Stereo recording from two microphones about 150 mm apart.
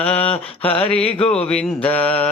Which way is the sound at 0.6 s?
40° left (ahead or behind).